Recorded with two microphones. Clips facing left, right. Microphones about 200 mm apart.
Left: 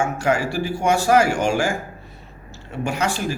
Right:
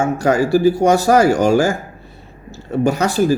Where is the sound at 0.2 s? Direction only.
40° right (ahead or behind).